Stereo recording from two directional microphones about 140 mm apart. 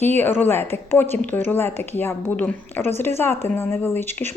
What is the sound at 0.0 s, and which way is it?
Speech, 15° left (ahead or behind).